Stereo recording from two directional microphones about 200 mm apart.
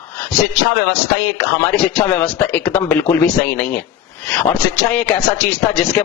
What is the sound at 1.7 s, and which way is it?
Speech, 10° left (ahead or behind).